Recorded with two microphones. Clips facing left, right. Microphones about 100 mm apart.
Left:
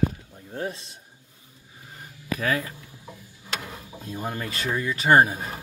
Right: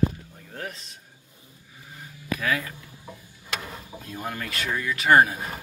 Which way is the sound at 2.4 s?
35° left (ahead or behind).